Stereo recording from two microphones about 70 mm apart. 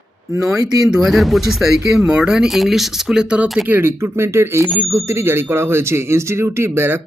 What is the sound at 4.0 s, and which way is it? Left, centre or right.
Speech, right.